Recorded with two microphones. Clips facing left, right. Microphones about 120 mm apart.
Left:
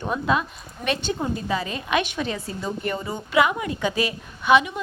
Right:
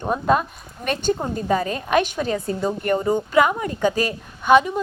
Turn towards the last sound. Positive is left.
turn(degrees=-40)  # may be behind; listen again after turning